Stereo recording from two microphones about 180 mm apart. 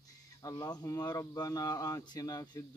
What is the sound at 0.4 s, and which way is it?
Speech, 20° left (ahead or behind).